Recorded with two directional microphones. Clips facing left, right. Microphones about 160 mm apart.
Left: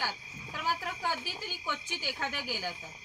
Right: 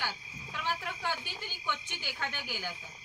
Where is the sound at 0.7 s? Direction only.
40° left (ahead or behind).